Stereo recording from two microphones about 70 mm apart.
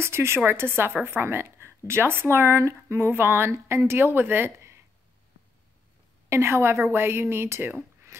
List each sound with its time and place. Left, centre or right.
0.0 s a woman's voice: right
6.2 s speech: right